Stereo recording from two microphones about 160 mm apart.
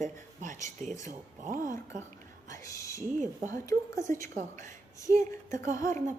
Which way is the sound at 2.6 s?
20° left (ahead or behind).